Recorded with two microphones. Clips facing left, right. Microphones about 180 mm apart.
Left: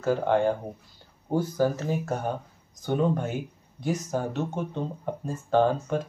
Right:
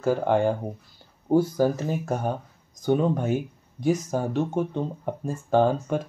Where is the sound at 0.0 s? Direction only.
10° right (ahead or behind).